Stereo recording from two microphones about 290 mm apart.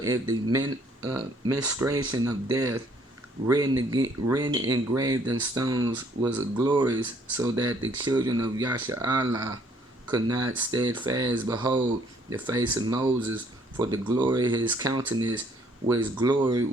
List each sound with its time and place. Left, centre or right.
0.0 s speech: centre